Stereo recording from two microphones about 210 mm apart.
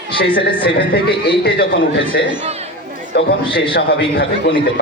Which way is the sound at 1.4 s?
45° left (ahead or behind).